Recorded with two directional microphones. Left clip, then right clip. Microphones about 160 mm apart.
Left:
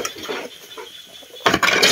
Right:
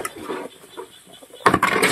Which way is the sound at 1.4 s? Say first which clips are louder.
Left 1 dB; 35° left (ahead or behind).